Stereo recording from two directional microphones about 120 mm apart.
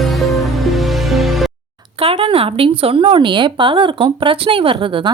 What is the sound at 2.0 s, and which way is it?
Speech, 50° right (ahead or behind).